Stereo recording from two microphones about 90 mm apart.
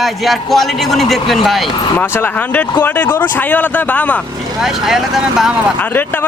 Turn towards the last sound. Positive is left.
turn(degrees=-5)  # may be behind; listen again after turning